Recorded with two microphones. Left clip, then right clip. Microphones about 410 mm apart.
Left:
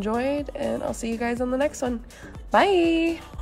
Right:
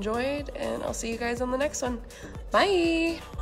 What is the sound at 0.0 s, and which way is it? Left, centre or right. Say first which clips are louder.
A woman's voice: left 3 dB; centre.